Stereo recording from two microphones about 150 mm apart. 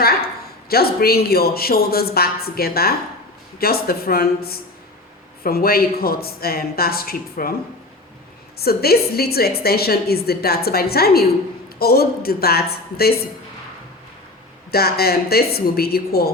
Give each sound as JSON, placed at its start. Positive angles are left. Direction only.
{"t": 0.7, "sound": "a woman's voice", "side_deg": 90}
{"t": 8.5, "sound": "a woman's voice", "side_deg": 90}
{"t": 14.7, "sound": "a woman's voice", "side_deg": 90}